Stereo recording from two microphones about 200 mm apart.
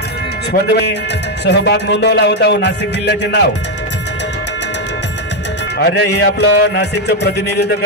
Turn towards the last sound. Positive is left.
turn(degrees=55)  # may be behind; listen again after turning